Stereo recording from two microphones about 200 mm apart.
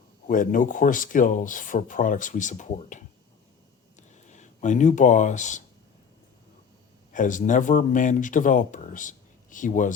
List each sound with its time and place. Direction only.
0.3 s speech: 40° left (ahead or behind)
4.1 s speech: 35° left (ahead or behind)
7.1 s speech: 40° left (ahead or behind)